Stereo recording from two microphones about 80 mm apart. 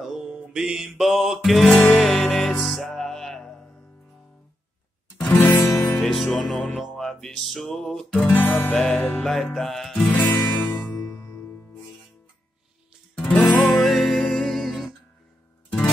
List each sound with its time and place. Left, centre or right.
0.0 s music: centre
0.8 s music: centre
5.1 s music: centre
6.0 s music: centre
10.1 s music: left
13.3 s music: centre
13.8 s music: centre